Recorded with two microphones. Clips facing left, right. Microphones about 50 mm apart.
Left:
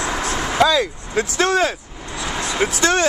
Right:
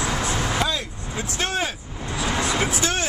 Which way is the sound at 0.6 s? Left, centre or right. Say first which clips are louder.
Left 10 dB; left.